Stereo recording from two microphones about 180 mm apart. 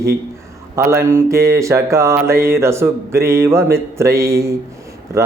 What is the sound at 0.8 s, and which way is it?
Mantra, 15° right (ahead or behind).